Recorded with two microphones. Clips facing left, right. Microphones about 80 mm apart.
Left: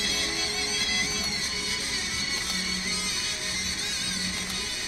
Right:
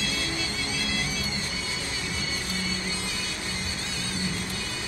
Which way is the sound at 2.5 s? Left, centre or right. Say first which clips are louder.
Right 2 dB; left.